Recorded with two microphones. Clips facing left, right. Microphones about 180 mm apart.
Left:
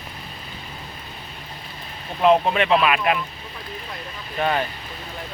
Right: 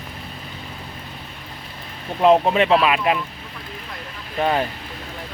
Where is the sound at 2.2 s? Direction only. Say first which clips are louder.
Right 2 dB; 25° right (ahead or behind).